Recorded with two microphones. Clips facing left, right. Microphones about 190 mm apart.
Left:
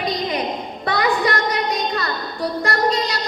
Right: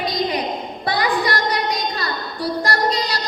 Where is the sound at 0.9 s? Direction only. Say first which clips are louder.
Left 1 dB; 35° right (ahead or behind).